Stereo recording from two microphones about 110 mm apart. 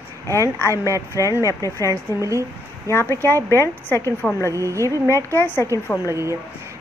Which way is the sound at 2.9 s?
20° left (ahead or behind).